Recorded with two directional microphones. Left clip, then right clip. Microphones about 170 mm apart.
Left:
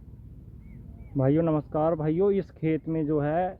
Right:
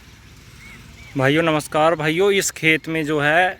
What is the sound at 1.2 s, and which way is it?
Speech, 15° right (ahead or behind).